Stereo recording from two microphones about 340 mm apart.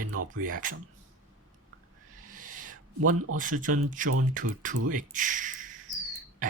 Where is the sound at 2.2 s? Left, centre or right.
Right.